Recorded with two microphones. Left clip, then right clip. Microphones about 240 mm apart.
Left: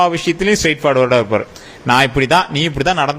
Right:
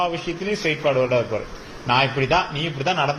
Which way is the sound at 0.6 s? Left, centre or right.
Left.